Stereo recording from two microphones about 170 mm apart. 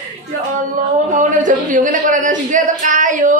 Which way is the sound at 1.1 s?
50° right (ahead or behind).